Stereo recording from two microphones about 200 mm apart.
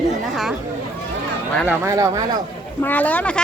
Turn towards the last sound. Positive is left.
turn(degrees=5)  # may be behind; listen again after turning